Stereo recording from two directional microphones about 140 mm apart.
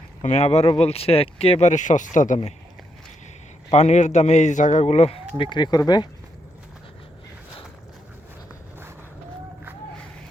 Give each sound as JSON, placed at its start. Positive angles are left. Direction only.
{"t": 0.2, "sound": "a man's voice", "side_deg": 55}
{"t": 3.7, "sound": "a man's voice", "side_deg": 55}